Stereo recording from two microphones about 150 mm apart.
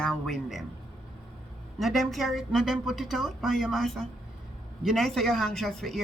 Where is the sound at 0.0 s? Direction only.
5° left (ahead or behind).